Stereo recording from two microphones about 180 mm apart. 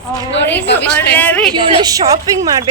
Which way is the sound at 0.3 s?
80° left.